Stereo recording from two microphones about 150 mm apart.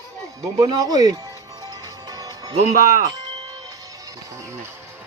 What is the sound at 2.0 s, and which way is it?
Music, 25° right (ahead or behind).